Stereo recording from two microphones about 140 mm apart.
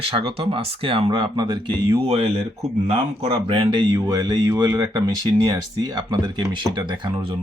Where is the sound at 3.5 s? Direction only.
35° right (ahead or behind).